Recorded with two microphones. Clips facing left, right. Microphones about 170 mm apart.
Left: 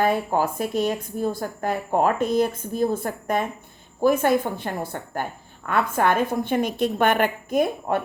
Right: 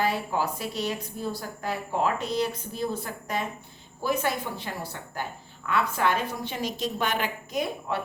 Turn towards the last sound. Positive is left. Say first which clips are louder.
# left 7 dB
turn(degrees=50)  # may be behind; listen again after turning